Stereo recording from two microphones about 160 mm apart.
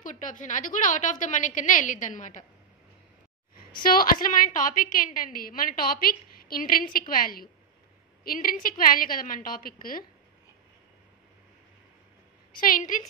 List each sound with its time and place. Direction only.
0.0 s a woman's voice: 55° left (ahead or behind)
3.8 s a woman's voice: 65° left (ahead or behind)
12.5 s a woman's voice: 60° left (ahead or behind)